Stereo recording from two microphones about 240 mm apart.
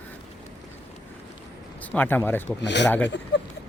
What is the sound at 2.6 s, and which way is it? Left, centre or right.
Speech, left.